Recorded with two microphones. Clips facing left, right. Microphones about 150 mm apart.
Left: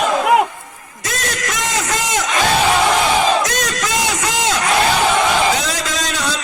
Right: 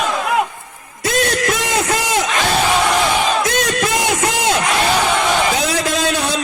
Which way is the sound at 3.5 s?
60° right (ahead or behind).